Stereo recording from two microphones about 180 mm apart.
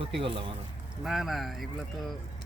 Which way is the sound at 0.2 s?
30° right (ahead or behind).